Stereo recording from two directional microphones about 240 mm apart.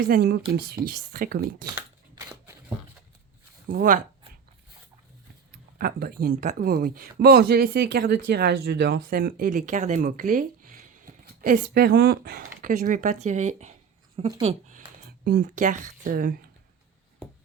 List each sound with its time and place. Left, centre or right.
0.1 s speech: right
1.7 s a sound: centre
3.7 s speech: right
5.8 s speech: right
15.2 s speech: right